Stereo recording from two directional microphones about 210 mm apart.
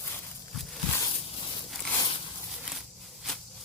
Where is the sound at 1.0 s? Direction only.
25° left (ahead or behind).